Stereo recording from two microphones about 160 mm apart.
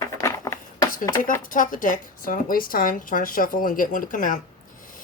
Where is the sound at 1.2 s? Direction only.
60° left (ahead or behind).